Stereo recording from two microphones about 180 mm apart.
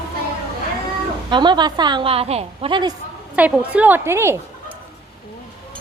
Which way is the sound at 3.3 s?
5° right (ahead or behind).